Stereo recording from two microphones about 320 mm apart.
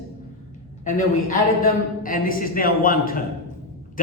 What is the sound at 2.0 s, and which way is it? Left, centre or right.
A man's voice, left.